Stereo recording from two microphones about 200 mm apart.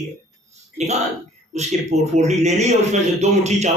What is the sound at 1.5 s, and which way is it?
A man's voice, 35° right (ahead or behind).